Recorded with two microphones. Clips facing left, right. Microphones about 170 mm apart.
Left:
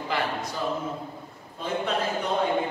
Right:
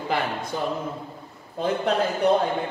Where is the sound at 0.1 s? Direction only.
55° right (ahead or behind).